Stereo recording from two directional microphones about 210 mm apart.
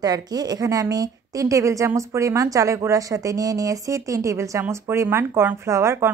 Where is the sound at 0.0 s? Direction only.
20° right (ahead or behind).